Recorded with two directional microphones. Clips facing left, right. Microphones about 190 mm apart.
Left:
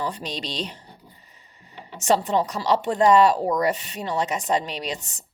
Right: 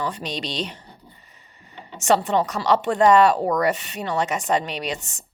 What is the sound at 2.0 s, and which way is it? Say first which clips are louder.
Speech: right 1 dB; 35° left (ahead or behind).